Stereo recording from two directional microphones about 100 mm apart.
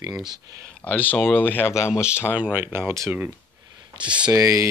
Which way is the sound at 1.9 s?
10° right (ahead or behind).